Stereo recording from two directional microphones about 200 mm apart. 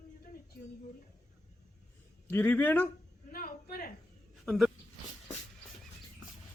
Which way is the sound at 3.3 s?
45° left (ahead or behind).